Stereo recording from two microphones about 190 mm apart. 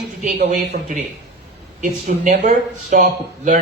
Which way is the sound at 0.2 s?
45° right (ahead or behind).